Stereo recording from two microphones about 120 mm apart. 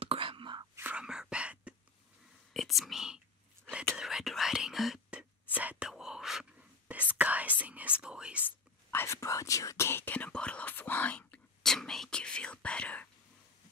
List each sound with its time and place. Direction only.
0.0 s whispering: 50° right (ahead or behind)
0.7 s whispering: 15° right (ahead or behind)
1.0 s whispering: 5° right (ahead or behind)
2.5 s whispering: centre (ahead or behind)
8.5 s whispering: 20° left (ahead or behind)